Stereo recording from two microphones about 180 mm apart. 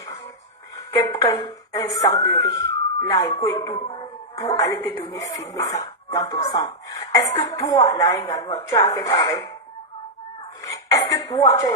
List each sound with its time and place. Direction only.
1.1 s speech: 20° left (ahead or behind)
10.6 s speech: 20° left (ahead or behind)